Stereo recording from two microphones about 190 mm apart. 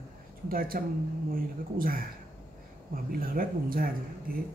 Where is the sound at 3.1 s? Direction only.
50° right (ahead or behind).